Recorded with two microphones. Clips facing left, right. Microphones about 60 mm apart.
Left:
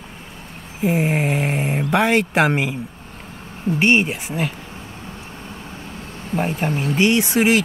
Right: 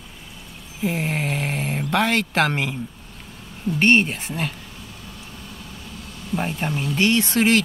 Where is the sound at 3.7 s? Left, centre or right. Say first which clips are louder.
Even; centre.